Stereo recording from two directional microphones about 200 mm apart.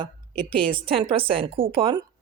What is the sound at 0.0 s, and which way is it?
Speech, 25° right (ahead or behind).